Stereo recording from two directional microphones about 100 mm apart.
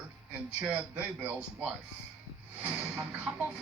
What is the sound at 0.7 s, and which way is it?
A woman's voice, 15° right (ahead or behind).